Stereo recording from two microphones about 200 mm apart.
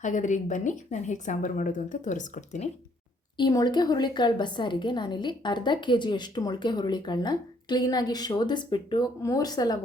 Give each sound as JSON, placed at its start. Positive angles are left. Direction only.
{"t": 0.0, "sound": "a woman's voice", "side_deg": 40}
{"t": 3.3, "sound": "a woman's voice", "side_deg": 20}